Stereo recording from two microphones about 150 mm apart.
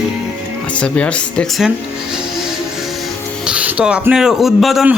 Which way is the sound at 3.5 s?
10° right (ahead or behind).